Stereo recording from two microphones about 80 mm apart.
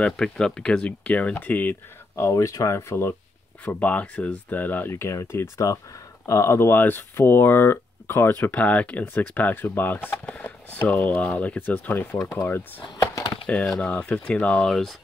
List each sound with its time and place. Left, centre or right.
0.0 s speech: centre
2.1 s speech: left
3.6 s speech: centre
12.2 s speech: left
12.4 s speech: left
12.9 s a sound: left
13.5 s speech: centre